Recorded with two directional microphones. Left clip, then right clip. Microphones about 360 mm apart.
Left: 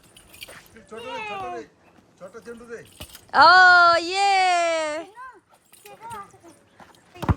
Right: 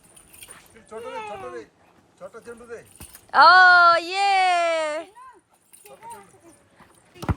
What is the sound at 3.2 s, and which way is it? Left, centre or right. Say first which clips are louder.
Speech: even; centre.